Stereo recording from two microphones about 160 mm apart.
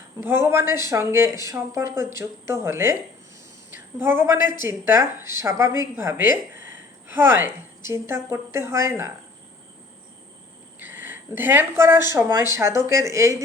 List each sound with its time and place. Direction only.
0.2 s speech: 15° right (ahead or behind)
10.8 s speech: 15° right (ahead or behind)